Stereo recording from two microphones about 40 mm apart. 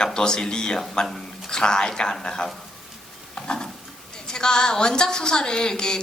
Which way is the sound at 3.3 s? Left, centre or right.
Left.